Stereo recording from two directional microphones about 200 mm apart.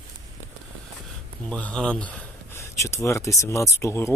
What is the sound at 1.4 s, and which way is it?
Speech, 5° left (ahead or behind).